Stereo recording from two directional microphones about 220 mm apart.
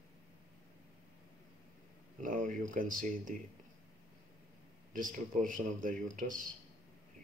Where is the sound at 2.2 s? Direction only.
35° right (ahead or behind).